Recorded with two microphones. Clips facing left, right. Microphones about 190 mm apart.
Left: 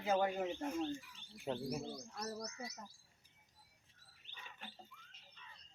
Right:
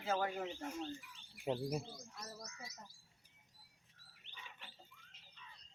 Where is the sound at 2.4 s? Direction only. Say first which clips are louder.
Left 7 dB; 35° left (ahead or behind).